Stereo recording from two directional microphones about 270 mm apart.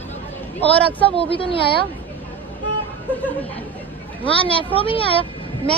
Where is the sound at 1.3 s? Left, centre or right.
Centre.